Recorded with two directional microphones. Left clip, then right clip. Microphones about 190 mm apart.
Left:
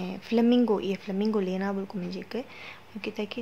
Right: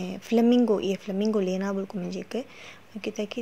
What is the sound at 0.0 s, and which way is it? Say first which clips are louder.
A woman's voice: right 2 dB; 20° right (ahead or behind).